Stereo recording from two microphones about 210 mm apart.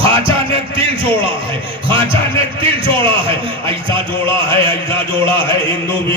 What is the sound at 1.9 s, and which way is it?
A man's voice, 25° right (ahead or behind).